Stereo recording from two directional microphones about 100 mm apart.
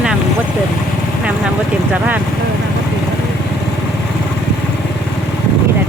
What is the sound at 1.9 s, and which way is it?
Speech, 15° right (ahead or behind).